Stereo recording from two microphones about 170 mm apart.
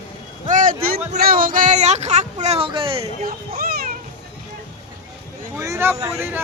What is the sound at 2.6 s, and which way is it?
Speech, 30° right (ahead or behind).